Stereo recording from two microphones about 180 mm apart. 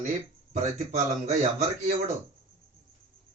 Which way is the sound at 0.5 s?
40° right (ahead or behind).